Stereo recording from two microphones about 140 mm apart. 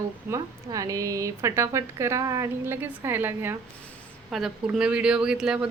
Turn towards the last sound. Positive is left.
turn(degrees=-5)  # may be behind; listen again after turning